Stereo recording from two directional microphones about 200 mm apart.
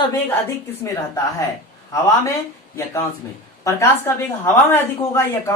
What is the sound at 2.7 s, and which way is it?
A woman's voice, 15° left (ahead or behind).